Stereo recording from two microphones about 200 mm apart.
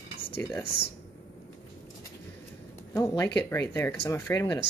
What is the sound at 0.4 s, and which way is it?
Speech, 10° left (ahead or behind).